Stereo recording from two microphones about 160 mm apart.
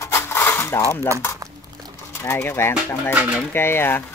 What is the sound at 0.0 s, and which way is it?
Cutlery, 15° left (ahead or behind).